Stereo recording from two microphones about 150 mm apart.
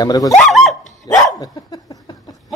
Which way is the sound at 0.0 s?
25° left (ahead or behind).